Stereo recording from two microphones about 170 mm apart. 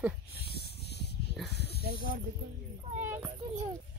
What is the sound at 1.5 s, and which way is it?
Snake, 80° left.